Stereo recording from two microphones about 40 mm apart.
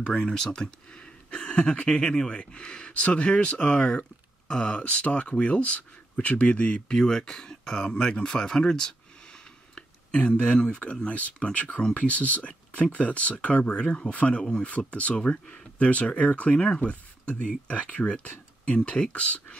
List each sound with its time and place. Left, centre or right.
0.2 s speech: centre
6.9 s speech: centre